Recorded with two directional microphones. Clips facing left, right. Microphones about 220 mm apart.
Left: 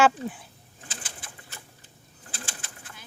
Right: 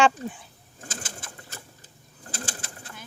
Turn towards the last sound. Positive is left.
turn(degrees=-45)  # may be behind; listen again after turning